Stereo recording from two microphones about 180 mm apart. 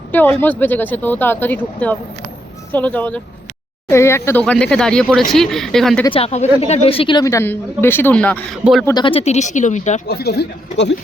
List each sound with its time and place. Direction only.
0.1 s speech: 10° left (ahead or behind)
6.1 s speech: 35° left (ahead or behind); by 8.4 s 10° left (ahead or behind)
8.8 s speech: 20° left (ahead or behind); by 10.0 s 40° left (ahead or behind)
10.1 s speech: 60° left (ahead or behind)